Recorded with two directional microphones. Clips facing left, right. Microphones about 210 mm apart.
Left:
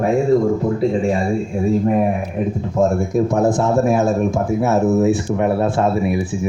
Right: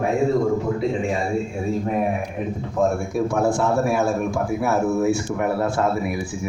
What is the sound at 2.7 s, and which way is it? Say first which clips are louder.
Speech: left 4 dB; 20° left (ahead or behind).